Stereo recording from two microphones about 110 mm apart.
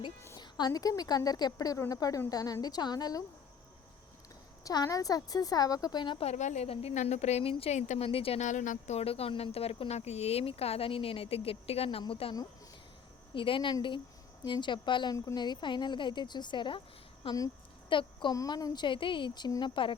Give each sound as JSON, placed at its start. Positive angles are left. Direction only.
{"t": 0.3, "sound": "speech", "side_deg": 40}
{"t": 4.6, "sound": "speech", "side_deg": 35}
{"t": 6.2, "sound": "a woman's voice", "side_deg": 90}
{"t": 13.3, "sound": "speech", "side_deg": 50}
{"t": 17.8, "sound": "speech", "side_deg": 45}